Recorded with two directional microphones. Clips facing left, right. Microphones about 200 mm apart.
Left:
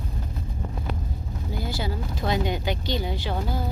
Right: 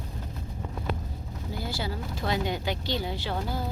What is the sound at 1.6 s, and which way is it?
Speech, 20° left (ahead or behind).